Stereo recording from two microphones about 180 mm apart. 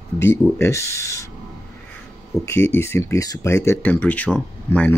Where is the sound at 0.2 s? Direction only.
15° left (ahead or behind).